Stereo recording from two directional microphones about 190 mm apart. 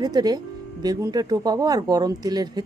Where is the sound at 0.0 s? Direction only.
20° right (ahead or behind).